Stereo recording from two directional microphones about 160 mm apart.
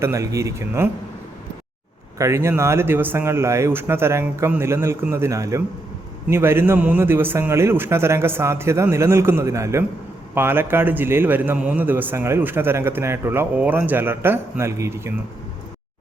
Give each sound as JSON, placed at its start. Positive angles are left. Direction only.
{"t": 0.0, "sound": "a man's voice", "side_deg": -20}
{"t": 2.1, "sound": "a man's voice", "side_deg": -20}